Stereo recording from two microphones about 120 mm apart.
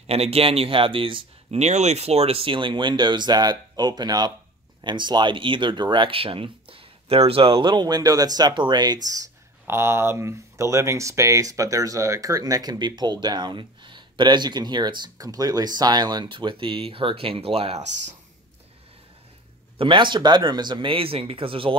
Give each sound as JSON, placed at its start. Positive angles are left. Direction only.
{"t": 0.0, "sound": "speech", "side_deg": -60}
{"t": 1.6, "sound": "speech", "side_deg": -70}
{"t": 9.7, "sound": "speech", "side_deg": -20}
{"t": 19.8, "sound": "speech", "side_deg": -45}